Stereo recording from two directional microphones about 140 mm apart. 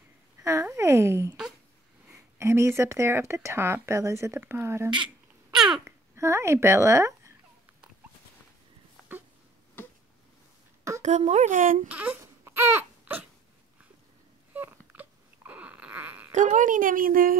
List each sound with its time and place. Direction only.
0.4 s a sound: 20° right (ahead or behind)
2.3 s speech: 20° right (ahead or behind)
4.9 s babbling: 5° right (ahead or behind)
5.9 s speech: 20° right (ahead or behind)
11.0 s speech: 55° right (ahead or behind)
11.9 s speech: 10° right (ahead or behind)
12.2 s baby cry: 20° right (ahead or behind)
14.5 s a sound: 10° right (ahead or behind)
16.3 s a woman's voice: 60° right (ahead or behind); by 17.4 s 85° right